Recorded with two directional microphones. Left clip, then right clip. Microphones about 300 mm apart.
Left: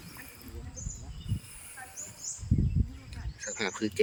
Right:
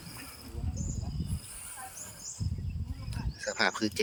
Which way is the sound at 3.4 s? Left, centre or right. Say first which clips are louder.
Right 4 dB; centre.